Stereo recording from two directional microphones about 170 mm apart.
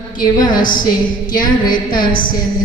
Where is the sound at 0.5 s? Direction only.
55° left (ahead or behind).